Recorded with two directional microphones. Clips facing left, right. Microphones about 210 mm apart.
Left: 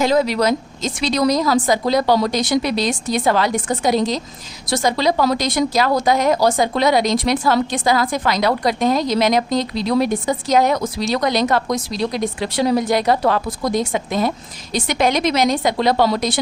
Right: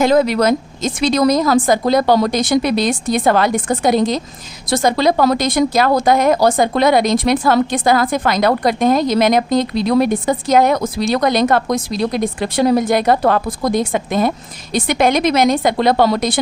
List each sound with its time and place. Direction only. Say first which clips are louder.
0.0 s a woman's voice: right 3 dB; 50° right (ahead or behind)